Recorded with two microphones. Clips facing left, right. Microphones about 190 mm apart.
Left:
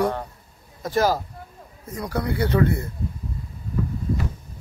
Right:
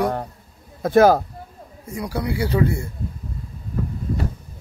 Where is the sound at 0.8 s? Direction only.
55° right (ahead or behind).